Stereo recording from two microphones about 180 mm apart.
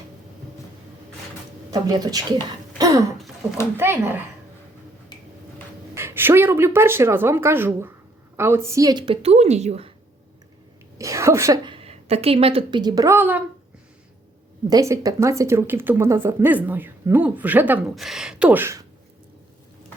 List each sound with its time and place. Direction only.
1.7 s a woman's voice: 20° right (ahead or behind)
2.7 s throat clearing: 20° right (ahead or behind)
3.8 s speech: 10° right (ahead or behind)
5.9 s a woman's voice: 15° right (ahead or behind); by 9.9 s 35° right (ahead or behind)
10.9 s a woman's voice: 15° right (ahead or behind)
14.7 s speech: 20° right (ahead or behind)